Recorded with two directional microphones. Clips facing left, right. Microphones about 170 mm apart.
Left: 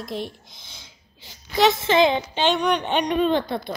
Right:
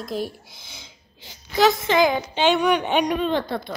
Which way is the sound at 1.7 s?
25° left (ahead or behind).